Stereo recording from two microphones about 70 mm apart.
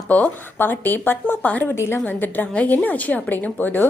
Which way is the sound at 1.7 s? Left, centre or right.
Left.